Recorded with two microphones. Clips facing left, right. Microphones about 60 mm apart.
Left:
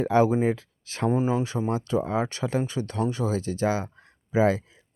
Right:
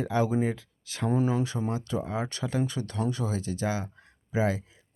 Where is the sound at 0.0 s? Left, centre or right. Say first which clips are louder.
Left 5 dB; left.